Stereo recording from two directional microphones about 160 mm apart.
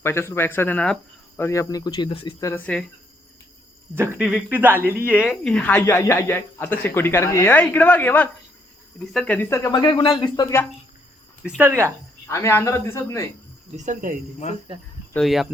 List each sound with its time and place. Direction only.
0.0 s speech: 15° left (ahead or behind); by 2.3 s 30° left (ahead or behind)
2.4 s speech: 15° left (ahead or behind)
3.9 s speech: 15° right (ahead or behind)
4.2 s speech: 5° right (ahead or behind)
5.8 s speech: 15° left (ahead or behind)
11.4 s speech: 5° right (ahead or behind)
11.7 s speech: 15° right (ahead or behind)
12.3 s speech: 15° left (ahead or behind)
13.7 s speech: 50° right (ahead or behind)
15.1 s speech: centre (ahead or behind)